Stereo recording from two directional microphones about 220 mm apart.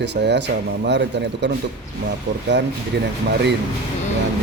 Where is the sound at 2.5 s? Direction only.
50° right (ahead or behind).